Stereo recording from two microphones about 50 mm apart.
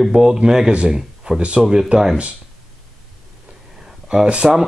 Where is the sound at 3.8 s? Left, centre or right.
Centre.